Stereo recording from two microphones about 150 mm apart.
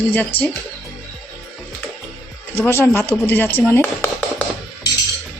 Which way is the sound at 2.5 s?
15° left (ahead or behind).